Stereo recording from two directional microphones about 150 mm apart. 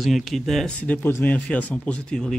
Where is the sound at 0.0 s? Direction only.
Centre (ahead or behind).